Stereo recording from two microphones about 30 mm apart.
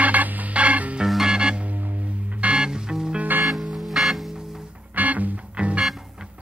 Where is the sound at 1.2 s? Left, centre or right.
Right.